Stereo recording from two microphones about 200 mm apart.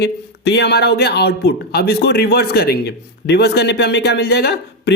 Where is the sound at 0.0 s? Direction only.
60° left (ahead or behind).